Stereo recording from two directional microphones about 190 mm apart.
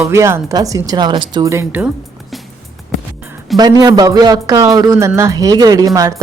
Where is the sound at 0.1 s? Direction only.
15° right (ahead or behind).